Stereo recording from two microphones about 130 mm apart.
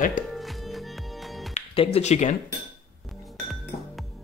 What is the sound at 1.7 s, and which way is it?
Speech, 50° left (ahead or behind).